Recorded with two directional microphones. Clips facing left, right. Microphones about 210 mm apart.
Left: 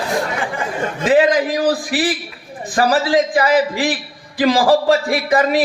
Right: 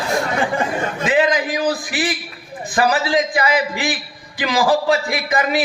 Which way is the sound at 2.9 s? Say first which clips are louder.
Left 6 dB; 35° left (ahead or behind).